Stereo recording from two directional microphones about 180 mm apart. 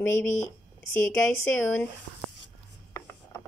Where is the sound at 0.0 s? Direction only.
15° left (ahead or behind).